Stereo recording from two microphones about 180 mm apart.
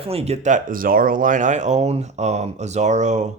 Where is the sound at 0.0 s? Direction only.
35° right (ahead or behind).